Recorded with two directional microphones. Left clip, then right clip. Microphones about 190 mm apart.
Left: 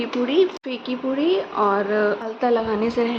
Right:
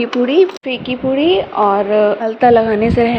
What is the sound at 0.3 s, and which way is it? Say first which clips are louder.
A woman's voice: right 6 dB; 20° right (ahead or behind).